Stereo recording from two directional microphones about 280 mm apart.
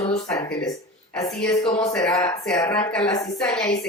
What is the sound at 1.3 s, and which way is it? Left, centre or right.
Speech, centre.